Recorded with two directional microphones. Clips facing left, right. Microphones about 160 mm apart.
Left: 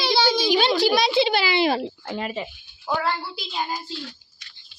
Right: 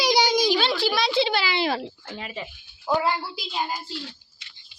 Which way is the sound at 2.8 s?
5° right (ahead or behind).